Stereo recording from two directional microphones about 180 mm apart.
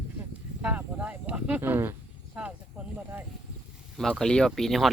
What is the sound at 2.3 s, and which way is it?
Snake, 5° right (ahead or behind).